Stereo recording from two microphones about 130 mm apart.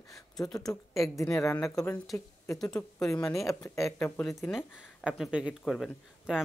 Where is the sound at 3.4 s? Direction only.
25° left (ahead or behind).